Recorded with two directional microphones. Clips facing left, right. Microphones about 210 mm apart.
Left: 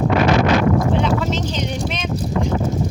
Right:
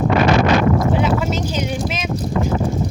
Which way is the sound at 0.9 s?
5° right (ahead or behind).